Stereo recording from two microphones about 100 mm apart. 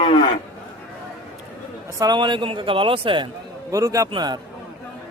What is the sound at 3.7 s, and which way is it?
Speech, 35° right (ahead or behind).